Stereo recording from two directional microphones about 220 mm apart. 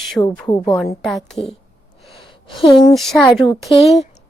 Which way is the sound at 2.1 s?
25° left (ahead or behind).